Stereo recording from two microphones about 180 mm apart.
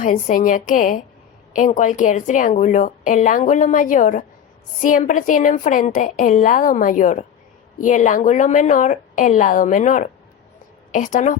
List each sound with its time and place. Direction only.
0.0 s a woman's voice: 45° left (ahead or behind)